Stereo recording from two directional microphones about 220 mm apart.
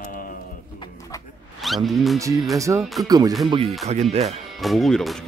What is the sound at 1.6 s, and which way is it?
Speech, centre (ahead or behind).